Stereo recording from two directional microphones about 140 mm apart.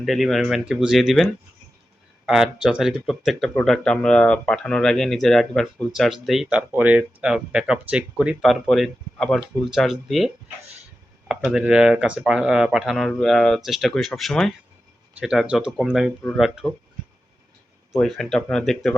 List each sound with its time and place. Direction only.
0.0 s speech: centre (ahead or behind)
17.9 s speech: 5° left (ahead or behind)